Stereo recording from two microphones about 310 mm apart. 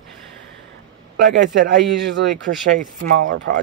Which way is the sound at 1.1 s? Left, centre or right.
Right.